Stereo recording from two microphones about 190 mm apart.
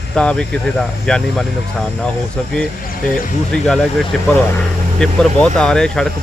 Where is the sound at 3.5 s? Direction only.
5° left (ahead or behind).